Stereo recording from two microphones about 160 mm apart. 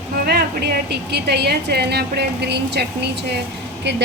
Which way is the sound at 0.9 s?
90° right.